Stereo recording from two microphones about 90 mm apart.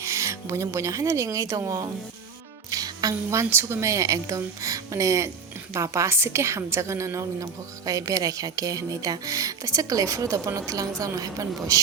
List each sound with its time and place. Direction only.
0.0 s a woman's voice: 35° right (ahead or behind)